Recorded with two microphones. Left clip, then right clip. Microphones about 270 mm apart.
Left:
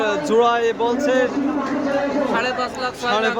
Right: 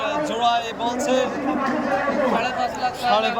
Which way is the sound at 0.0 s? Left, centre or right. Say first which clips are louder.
Left 4 dB; centre.